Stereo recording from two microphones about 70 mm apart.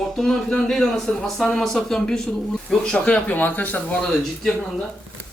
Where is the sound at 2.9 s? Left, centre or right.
Centre.